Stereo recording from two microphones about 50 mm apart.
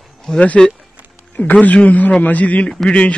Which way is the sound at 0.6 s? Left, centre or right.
Centre.